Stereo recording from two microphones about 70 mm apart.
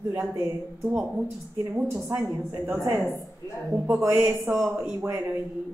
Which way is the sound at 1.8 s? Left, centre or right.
Right.